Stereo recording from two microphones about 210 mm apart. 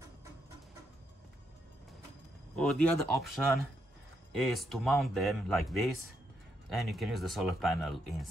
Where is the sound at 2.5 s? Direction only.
5° left (ahead or behind).